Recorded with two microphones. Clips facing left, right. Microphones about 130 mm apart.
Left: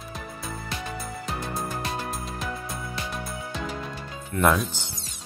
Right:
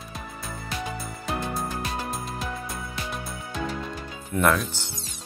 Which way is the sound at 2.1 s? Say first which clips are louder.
Right 1 dB; centre (ahead or behind).